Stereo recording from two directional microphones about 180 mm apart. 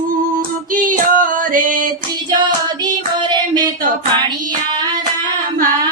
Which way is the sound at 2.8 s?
20° right (ahead or behind).